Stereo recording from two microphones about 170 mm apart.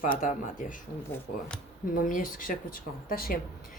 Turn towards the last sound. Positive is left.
turn(degrees=55)  # may be behind; listen again after turning